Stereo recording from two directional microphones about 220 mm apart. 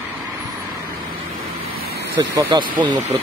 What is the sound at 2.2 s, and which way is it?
Speech, 20° right (ahead or behind).